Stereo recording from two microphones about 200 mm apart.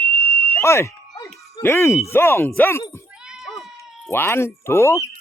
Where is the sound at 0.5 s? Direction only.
15° left (ahead or behind).